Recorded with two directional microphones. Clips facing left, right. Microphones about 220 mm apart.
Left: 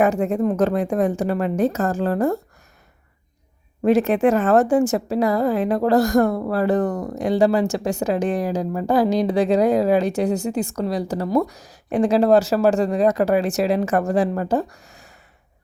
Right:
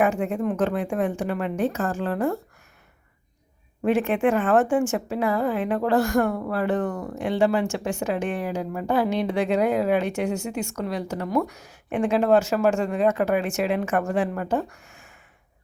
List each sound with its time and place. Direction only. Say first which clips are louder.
0.0 s a woman's voice: left 4 dB; 40° left (ahead or behind)
3.8 s a woman's voice: left 5 dB; 40° left (ahead or behind)